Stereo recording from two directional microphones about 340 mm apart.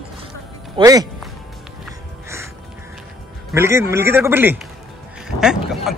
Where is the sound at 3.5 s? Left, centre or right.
Centre.